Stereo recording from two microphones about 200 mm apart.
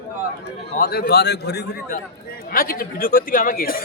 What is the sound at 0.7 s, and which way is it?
Speech, 45° left (ahead or behind).